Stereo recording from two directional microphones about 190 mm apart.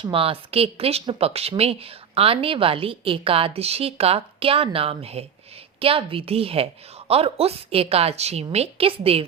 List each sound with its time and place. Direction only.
0.0 s a woman's voice: 30° right (ahead or behind)